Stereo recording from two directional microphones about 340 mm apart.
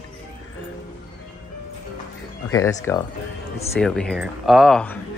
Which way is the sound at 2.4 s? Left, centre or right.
Centre.